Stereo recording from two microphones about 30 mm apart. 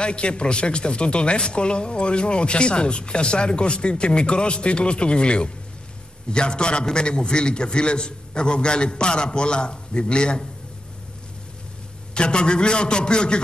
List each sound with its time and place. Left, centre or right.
0.0 s a man's voice: left
12.1 s a man's voice: left